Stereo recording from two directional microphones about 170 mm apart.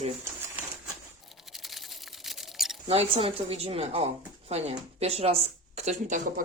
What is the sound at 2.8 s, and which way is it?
Speech, 35° right (ahead or behind).